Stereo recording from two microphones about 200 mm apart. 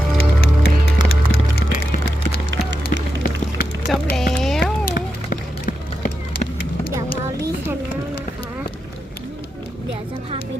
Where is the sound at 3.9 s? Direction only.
Centre (ahead or behind).